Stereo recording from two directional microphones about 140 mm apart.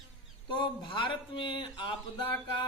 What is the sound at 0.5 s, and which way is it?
Speech, 35° left (ahead or behind).